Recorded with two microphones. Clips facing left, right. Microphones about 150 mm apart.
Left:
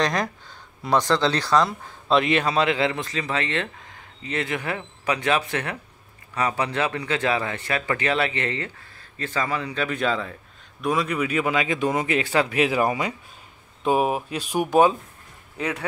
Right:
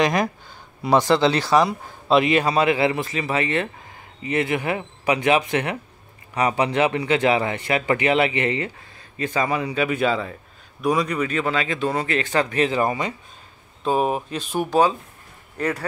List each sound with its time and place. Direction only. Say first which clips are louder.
0.0 s speech: right 4 dB; 10° right (ahead or behind)